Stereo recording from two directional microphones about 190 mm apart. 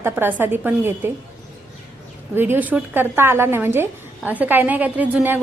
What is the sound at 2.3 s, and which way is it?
A woman's voice, 10° right (ahead or behind).